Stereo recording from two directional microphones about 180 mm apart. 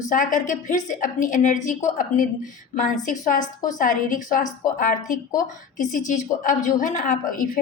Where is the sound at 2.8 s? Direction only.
50° left (ahead or behind).